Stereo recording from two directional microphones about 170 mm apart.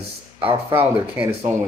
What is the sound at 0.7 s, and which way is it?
Speech, 10° right (ahead or behind).